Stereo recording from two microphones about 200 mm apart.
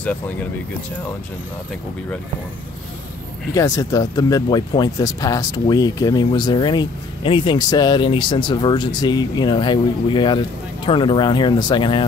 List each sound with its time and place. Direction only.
0.0 s speech: 10° left (ahead or behind)
3.5 s speech: 15° left (ahead or behind)